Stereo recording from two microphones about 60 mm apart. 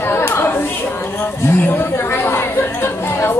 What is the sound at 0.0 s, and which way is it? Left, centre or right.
Chatter, left.